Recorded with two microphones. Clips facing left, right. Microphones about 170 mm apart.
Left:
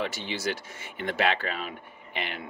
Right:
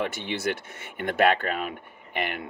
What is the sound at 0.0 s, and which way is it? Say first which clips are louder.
Speech: right 3 dB; 55° right (ahead or behind).